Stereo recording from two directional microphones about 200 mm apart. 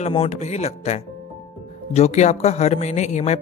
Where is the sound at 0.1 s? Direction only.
35° left (ahead or behind).